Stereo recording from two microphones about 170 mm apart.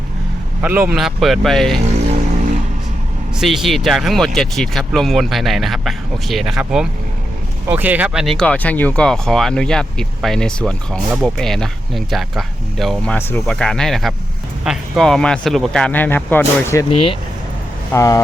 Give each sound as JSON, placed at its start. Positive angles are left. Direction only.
{"t": 0.6, "sound": "a man's voice", "side_deg": -10}
{"t": 0.9, "sound": "speech", "side_deg": 0}
{"t": 3.3, "sound": "speech", "side_deg": 0}
{"t": 17.9, "sound": "speech", "side_deg": 20}